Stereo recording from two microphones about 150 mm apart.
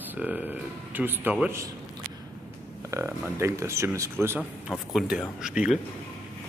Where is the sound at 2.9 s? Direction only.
20° right (ahead or behind).